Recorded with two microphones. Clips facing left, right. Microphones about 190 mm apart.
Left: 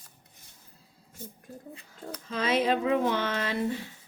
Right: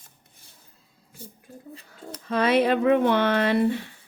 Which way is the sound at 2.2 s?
65° right (ahead or behind).